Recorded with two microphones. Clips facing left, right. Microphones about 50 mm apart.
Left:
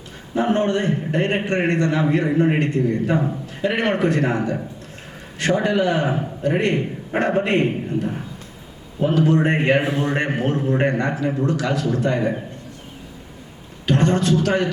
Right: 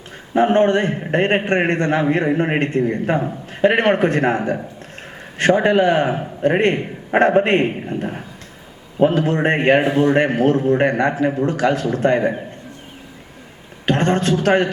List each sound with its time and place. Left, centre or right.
0.3 s a man's voice: right
13.8 s a man's voice: right